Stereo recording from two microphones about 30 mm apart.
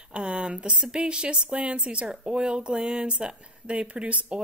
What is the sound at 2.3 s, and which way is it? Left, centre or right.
Speech, right.